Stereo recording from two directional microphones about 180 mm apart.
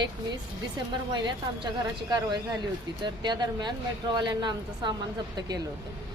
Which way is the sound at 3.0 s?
25° right (ahead or behind).